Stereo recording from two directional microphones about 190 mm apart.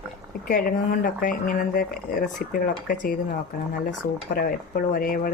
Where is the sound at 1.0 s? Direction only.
45° left (ahead or behind).